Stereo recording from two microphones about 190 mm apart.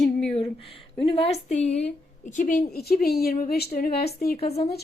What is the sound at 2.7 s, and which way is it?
A woman's voice, 55° left (ahead or behind).